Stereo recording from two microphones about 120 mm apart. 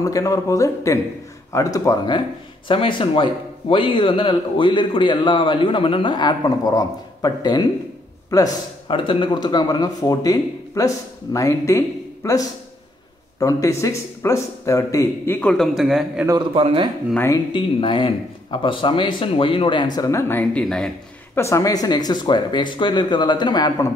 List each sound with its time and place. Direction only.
0.0 s speech: 30° left (ahead or behind)
2.7 s a man's voice: 45° left (ahead or behind); by 8.5 s 30° left (ahead or behind)
8.8 s speech: 45° left (ahead or behind); by 15.5 s 15° left (ahead or behind)
15.5 s a man's voice: centre (ahead or behind)
16.5 s speech: 50° right (ahead or behind)
17.5 s a man's voice: 45° left (ahead or behind); by 20.6 s 15° left (ahead or behind)
20.6 s a man's voice: 5° left (ahead or behind)
21.4 s speech: 25° left (ahead or behind)